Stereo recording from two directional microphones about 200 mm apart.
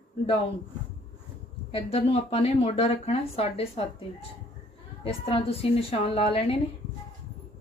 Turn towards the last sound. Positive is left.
turn(degrees=30)  # may be behind; listen again after turning